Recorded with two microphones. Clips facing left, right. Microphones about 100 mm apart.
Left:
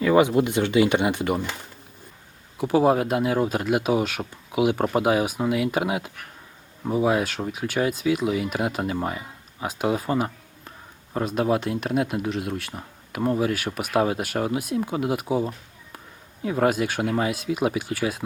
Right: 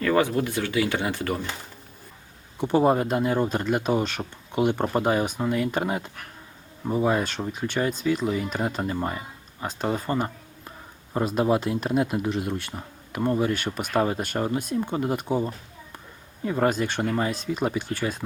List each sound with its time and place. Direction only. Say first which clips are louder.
0.0 s speech: left 4 dB; 15° left (ahead or behind)
2.6 s speech: left 1 dB; 5° left (ahead or behind)